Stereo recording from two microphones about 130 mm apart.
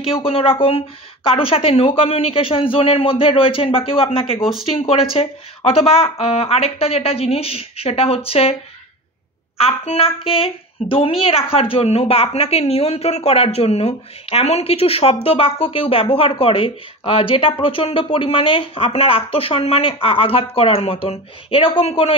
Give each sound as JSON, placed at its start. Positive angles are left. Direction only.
{"t": 0.0, "sound": "a woman's voice", "side_deg": 45}
{"t": 9.6, "sound": "a woman's voice", "side_deg": 50}